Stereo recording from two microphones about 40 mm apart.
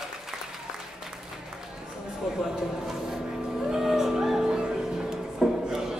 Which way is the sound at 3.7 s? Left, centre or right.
Centre.